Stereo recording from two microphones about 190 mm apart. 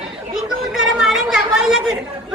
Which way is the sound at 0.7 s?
Centre (ahead or behind).